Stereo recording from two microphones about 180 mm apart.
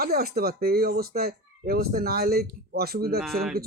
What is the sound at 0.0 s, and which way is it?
Speech, 55° right (ahead or behind).